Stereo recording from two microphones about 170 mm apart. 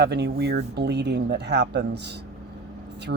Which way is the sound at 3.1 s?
90° right.